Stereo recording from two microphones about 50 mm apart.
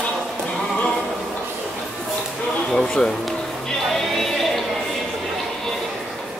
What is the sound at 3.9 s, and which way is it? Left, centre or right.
Music, centre.